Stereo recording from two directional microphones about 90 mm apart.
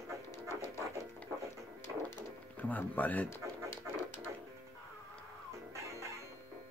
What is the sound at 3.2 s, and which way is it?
Music, 30° left (ahead or behind).